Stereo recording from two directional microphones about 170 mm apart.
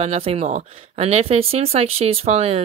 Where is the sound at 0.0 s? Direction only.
35° right (ahead or behind).